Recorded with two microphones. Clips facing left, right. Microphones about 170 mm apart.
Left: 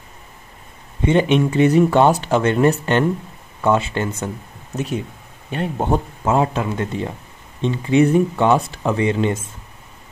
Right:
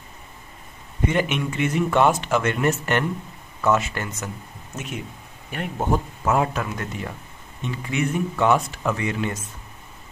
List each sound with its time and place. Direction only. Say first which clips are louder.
1.0 s speech: left 7 dB; 25° left (ahead or behind)